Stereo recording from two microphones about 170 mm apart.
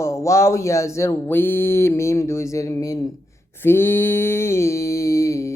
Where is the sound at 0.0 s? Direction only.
15° left (ahead or behind).